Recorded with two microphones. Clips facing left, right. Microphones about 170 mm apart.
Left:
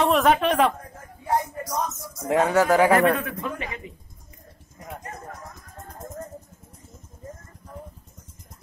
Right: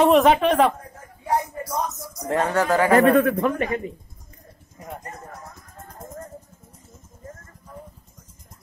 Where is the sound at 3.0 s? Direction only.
55° right (ahead or behind).